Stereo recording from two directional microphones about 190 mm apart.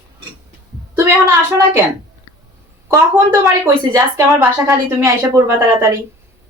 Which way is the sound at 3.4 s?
15° right (ahead or behind).